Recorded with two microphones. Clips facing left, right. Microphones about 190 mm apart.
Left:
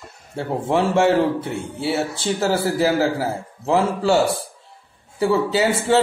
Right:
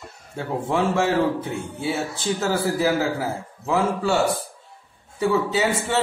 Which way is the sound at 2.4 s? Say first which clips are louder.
Left 3 dB; 30° left (ahead or behind).